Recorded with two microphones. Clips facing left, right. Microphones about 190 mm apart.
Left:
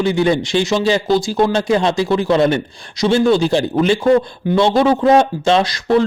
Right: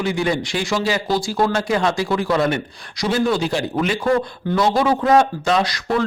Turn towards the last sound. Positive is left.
turn(degrees=25)  # may be behind; listen again after turning